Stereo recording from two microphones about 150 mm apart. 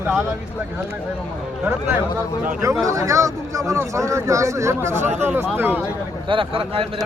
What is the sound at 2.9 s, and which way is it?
Speech, 20° right (ahead or behind).